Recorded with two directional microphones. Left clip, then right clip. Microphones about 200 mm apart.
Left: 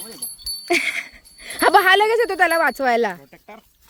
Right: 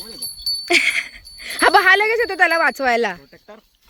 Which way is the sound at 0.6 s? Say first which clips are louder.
Right 4 dB; 5° left (ahead or behind).